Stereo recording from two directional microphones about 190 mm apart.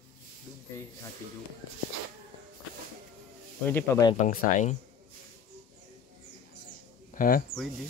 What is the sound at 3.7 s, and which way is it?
Speech, 10° left (ahead or behind).